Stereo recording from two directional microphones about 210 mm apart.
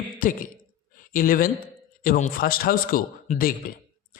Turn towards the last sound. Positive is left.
turn(degrees=45)  # may be behind; listen again after turning